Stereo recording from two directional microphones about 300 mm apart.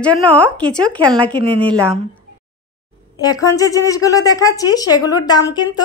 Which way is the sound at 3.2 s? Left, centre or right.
Centre.